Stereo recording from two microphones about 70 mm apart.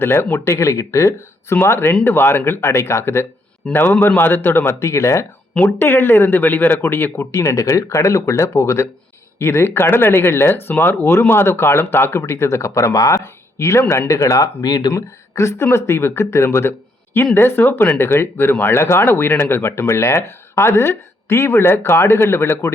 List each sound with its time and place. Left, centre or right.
0.0 s speech: left
1.5 s speech: left
3.7 s speech: left
5.6 s speech: left
7.3 s speech: left
13.8 s speech: left
14.1 s speech: left
14.6 s speech: left
14.9 s speech: left